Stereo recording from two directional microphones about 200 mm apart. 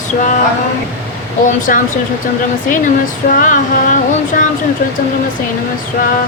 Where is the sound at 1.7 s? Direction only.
45° left (ahead or behind).